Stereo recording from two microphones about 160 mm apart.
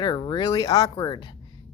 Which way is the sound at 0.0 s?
30° left (ahead or behind).